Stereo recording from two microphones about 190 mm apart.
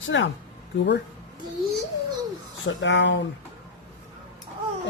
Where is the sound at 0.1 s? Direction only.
75° left (ahead or behind).